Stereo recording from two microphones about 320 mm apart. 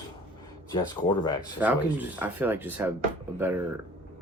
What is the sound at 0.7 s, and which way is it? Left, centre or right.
Speech, centre.